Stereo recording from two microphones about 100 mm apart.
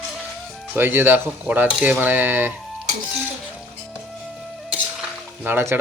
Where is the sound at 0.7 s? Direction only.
20° right (ahead or behind).